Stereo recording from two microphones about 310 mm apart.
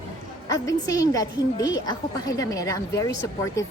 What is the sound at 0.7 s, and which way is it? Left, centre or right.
A woman's voice, centre.